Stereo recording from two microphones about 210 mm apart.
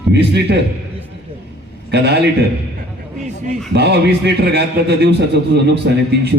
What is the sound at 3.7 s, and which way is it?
A man's voice, 50° right (ahead or behind).